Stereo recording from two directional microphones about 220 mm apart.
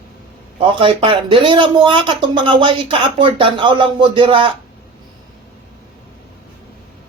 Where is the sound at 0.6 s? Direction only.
25° right (ahead or behind).